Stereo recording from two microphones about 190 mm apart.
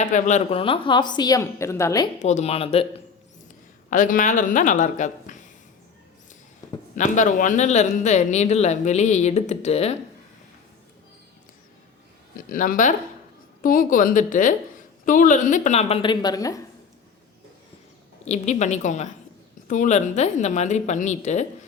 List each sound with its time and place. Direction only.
0.0 s a woman's voice: 40° left (ahead or behind); by 2.0 s 15° left (ahead or behind)
2.1 s a man's voice: 35° left (ahead or behind)
3.8 s speech: 45° left (ahead or behind)
6.9 s a man's voice: 40° left (ahead or behind)
12.4 s a man's voice: 45° left (ahead or behind); by 16.6 s 20° left (ahead or behind)
18.3 s a man's voice: 40° left (ahead or behind)